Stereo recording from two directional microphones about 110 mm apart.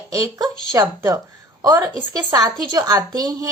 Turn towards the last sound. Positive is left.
turn(degrees=-35)  # may be behind; listen again after turning